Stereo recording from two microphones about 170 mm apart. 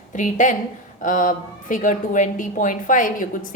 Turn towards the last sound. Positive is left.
turn(degrees=50)  # may be behind; listen again after turning